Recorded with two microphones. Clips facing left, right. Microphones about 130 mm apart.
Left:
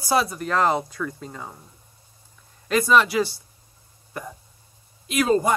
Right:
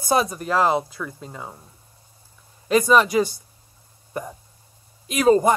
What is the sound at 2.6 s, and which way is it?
Speech, 20° right (ahead or behind).